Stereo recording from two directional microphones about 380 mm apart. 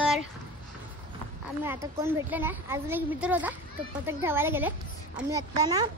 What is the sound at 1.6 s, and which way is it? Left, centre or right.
A woman's voice, centre.